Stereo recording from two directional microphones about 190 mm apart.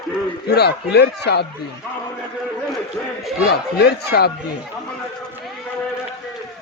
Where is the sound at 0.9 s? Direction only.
60° left (ahead or behind).